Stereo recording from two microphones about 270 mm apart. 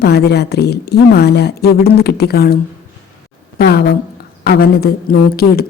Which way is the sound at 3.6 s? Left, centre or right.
Left.